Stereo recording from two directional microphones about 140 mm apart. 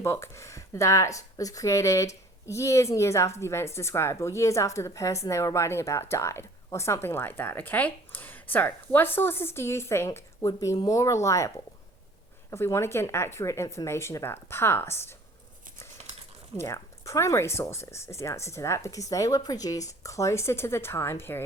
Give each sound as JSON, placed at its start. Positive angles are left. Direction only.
{"t": 0.0, "sound": "speech", "side_deg": 20}
{"t": 16.6, "sound": "speech", "side_deg": 20}